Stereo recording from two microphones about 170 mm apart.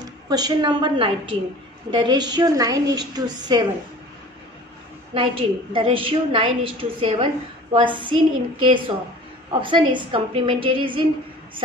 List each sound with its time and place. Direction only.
0.3 s a woman's voice: 25° right (ahead or behind)
5.1 s a woman's voice: 30° right (ahead or behind)